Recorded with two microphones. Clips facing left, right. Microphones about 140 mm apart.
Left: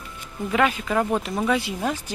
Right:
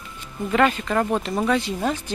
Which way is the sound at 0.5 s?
5° left (ahead or behind).